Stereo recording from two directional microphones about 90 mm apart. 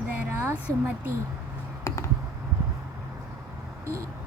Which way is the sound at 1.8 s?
30° left (ahead or behind).